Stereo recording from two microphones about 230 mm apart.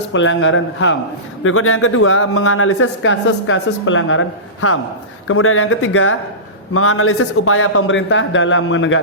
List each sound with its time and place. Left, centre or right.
0.1 s speech: left
1.5 s speech: left